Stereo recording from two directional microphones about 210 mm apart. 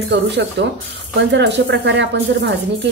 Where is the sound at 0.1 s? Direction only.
55° right (ahead or behind).